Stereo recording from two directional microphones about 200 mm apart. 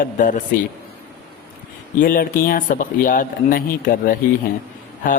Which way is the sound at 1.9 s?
45° left (ahead or behind).